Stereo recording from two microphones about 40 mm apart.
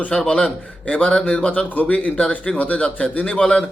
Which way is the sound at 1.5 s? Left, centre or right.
Left.